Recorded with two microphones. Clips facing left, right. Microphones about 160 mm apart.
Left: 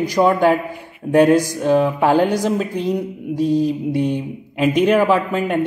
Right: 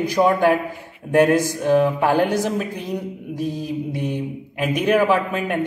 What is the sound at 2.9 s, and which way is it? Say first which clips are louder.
Mantra: left 6 dB; 20° left (ahead or behind).